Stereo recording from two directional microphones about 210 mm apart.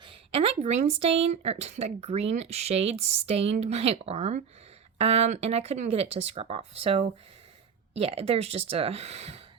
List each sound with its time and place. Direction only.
0.0 s a woman's voice: 25° right (ahead or behind)